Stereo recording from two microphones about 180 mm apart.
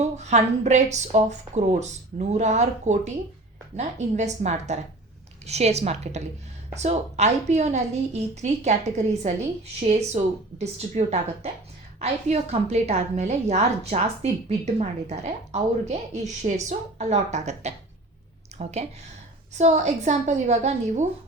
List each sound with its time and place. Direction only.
0.0 s a woman's voice: 40° right (ahead or behind)